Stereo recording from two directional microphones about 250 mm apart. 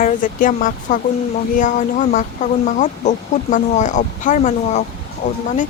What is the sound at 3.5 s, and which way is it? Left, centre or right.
Speech, left.